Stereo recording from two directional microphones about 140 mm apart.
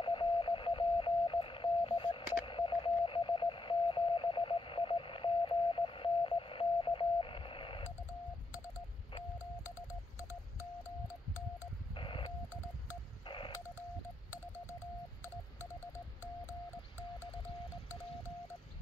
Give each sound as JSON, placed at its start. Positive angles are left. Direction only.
{"t": 0.0, "sound": "radio", "side_deg": 35}
{"t": 11.9, "sound": "telephone dialing", "side_deg": 35}